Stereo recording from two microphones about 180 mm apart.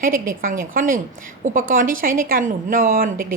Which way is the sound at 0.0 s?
50° right (ahead or behind).